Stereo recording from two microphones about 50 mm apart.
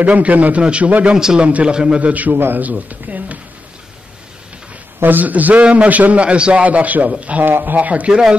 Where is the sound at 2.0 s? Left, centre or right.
Right.